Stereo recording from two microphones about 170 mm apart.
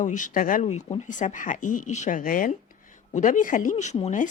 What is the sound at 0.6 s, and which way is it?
Speech, 40° left (ahead or behind).